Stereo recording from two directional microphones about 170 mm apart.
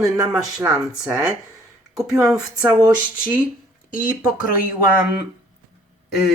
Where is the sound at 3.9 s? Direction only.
55° left (ahead or behind).